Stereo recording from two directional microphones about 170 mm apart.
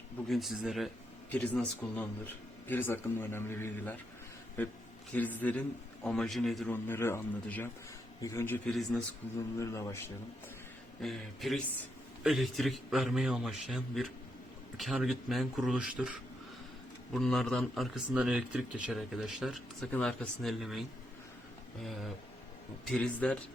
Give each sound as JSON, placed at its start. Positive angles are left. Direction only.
{"t": 0.3, "sound": "speech", "side_deg": 0}
{"t": 6.8, "sound": "speech", "side_deg": 15}
{"t": 11.0, "sound": "speech", "side_deg": 0}
{"t": 17.2, "sound": "speech", "side_deg": 0}
{"t": 22.9, "sound": "speech", "side_deg": 5}